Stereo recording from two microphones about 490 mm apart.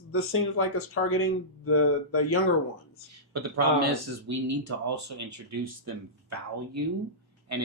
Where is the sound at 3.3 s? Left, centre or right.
Right.